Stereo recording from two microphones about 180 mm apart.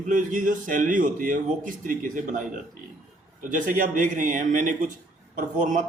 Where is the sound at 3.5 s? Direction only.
45° right (ahead or behind).